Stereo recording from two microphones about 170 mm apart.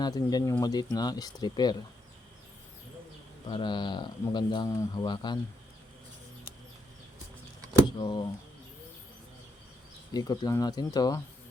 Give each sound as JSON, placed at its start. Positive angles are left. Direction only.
{"t": 0.0, "sound": "speech", "side_deg": 20}
{"t": 3.5, "sound": "speech", "side_deg": 25}
{"t": 7.7, "sound": "speech", "side_deg": 25}
{"t": 10.1, "sound": "speech", "side_deg": 25}